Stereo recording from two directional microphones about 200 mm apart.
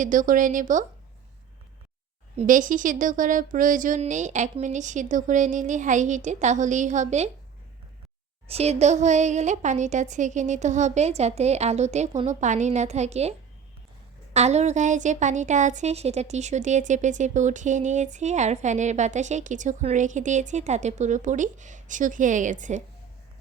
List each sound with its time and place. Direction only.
0.0 s a woman's voice: 40° right (ahead or behind)
2.3 s a woman's voice: 35° right (ahead or behind)
8.4 s a woman's voice: 30° right (ahead or behind)
14.3 s a woman's voice: 35° right (ahead or behind)